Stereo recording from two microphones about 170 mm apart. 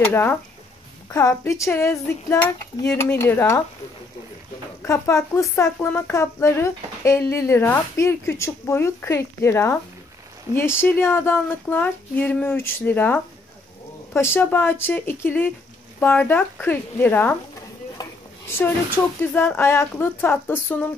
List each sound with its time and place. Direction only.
0.0 s speech: 10° left (ahead or behind)
4.8 s speech: 15° left (ahead or behind)
19.3 s speech: 15° left (ahead or behind)